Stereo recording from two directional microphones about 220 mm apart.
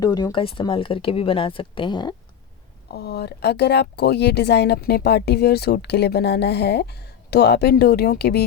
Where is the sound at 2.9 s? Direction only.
50° left (ahead or behind).